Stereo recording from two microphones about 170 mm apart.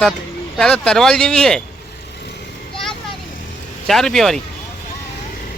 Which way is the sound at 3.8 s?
Centre (ahead or behind).